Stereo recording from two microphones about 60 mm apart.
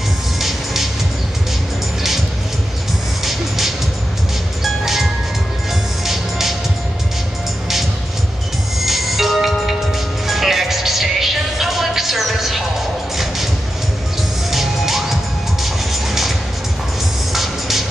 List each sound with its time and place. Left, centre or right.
0.4 s music: centre
3.3 s music: centre
6.0 s music: centre
8.8 s music: centre
14.5 s music: centre